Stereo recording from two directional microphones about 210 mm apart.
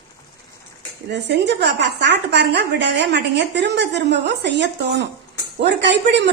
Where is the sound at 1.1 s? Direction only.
55° right (ahead or behind).